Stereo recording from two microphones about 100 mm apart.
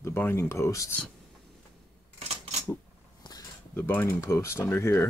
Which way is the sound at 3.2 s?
45° left (ahead or behind).